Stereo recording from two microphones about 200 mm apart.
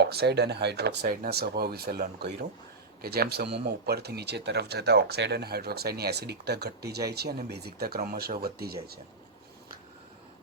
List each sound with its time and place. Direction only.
0.0 s speech: 55° right (ahead or behind)